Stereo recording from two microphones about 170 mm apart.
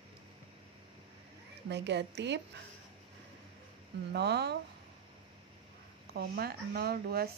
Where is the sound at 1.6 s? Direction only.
90° right.